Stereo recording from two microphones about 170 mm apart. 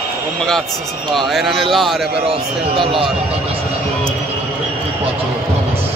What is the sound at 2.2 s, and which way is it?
Speech, 35° right (ahead or behind).